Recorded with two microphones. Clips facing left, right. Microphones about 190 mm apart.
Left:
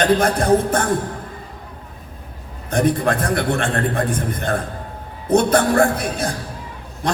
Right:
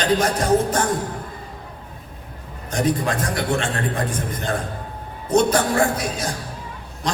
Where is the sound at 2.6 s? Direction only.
55° left (ahead or behind).